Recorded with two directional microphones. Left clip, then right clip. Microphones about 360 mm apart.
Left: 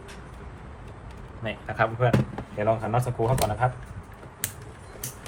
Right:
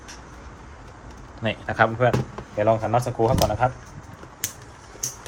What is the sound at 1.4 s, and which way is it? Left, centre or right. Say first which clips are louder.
Speech: right 5 dB; right.